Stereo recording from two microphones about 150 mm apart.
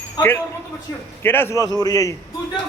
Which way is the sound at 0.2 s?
15° left (ahead or behind).